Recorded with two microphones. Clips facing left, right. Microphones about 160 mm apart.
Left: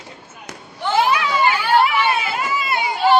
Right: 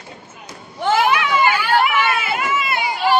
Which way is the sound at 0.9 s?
30° left (ahead or behind).